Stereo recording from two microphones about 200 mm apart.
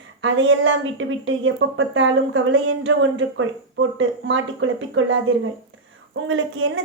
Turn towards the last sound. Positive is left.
turn(degrees=-75)  # may be behind; listen again after turning